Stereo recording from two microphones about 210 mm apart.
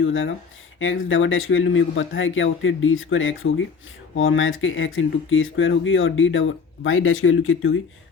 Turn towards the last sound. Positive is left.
turn(degrees=75)  # may be behind; listen again after turning